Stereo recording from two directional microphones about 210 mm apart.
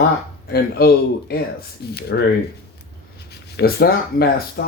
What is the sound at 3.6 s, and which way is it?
Speech, 50° left (ahead or behind).